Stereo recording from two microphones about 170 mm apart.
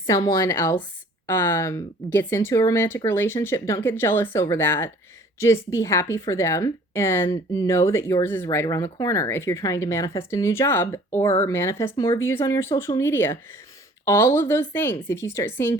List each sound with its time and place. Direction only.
0.0 s a woman's voice: 20° left (ahead or behind)